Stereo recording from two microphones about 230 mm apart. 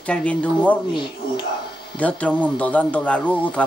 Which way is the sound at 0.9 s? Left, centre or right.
Centre.